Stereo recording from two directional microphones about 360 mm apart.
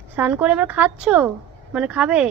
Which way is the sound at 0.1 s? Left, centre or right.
Centre.